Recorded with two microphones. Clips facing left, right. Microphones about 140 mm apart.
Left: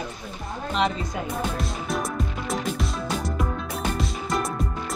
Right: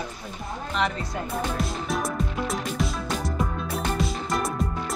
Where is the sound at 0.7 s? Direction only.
20° left (ahead or behind).